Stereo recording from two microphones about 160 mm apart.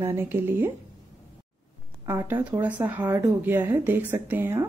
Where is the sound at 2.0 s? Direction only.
15° right (ahead or behind).